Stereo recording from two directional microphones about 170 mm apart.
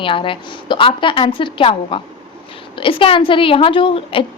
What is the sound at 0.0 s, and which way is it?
A woman's voice, 30° left (ahead or behind).